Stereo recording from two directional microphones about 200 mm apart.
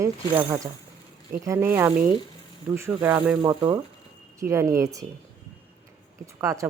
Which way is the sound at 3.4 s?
25° right (ahead or behind).